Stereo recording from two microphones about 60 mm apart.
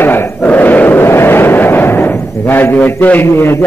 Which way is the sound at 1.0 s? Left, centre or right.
Left.